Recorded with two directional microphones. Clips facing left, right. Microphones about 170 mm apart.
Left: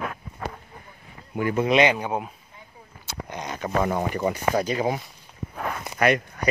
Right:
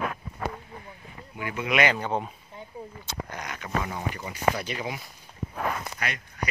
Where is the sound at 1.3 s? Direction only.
40° left (ahead or behind).